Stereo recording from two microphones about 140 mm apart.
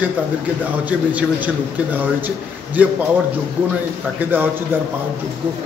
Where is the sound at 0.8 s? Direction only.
10° right (ahead or behind).